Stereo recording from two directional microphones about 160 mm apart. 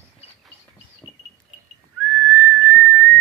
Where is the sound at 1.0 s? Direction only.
25° left (ahead or behind).